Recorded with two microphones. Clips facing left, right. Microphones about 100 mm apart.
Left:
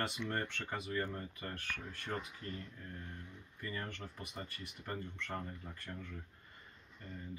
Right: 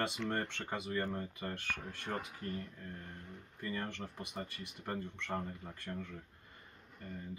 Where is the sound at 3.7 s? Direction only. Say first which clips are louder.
Right 4 dB; 30° right (ahead or behind).